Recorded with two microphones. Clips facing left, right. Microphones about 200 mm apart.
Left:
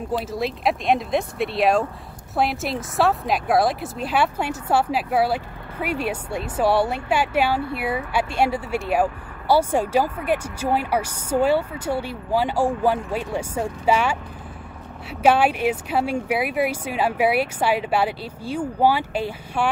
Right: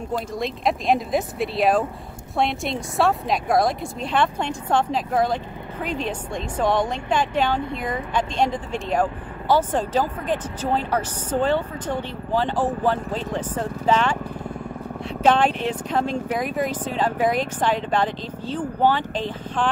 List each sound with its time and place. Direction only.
0.3 s speech: centre (ahead or behind)